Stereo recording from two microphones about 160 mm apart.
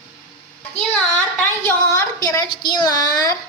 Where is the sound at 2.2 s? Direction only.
25° left (ahead or behind).